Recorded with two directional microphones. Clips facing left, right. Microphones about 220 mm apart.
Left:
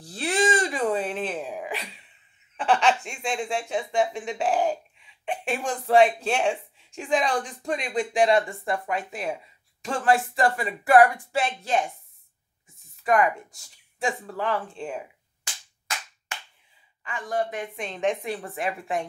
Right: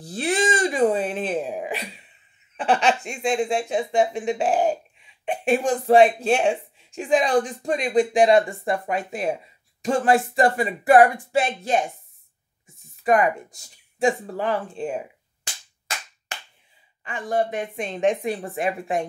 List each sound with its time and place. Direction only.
0.0 s a sound: 20° right (ahead or behind)
2.5 s speech: 20° right (ahead or behind)
7.7 s speech: 40° right (ahead or behind)
8.1 s speech: 20° right (ahead or behind)
13.0 s speech: 20° right (ahead or behind)
17.0 s speech: 25° right (ahead or behind)